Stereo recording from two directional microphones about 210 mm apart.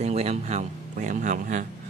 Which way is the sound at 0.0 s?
30° right (ahead or behind).